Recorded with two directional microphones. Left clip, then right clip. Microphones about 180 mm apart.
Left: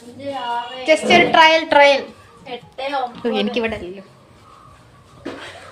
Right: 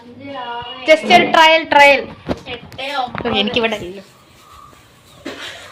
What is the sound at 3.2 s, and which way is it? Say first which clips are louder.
Speech: right 5 dB; 5° left (ahead or behind).